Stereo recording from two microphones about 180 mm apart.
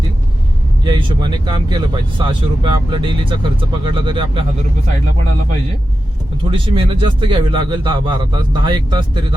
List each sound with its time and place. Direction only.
0.9 s speech: 25° right (ahead or behind)
6.4 s speech: 30° right (ahead or behind)